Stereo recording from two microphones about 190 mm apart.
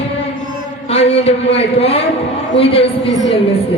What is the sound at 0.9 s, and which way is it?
A man's voice, 35° left (ahead or behind).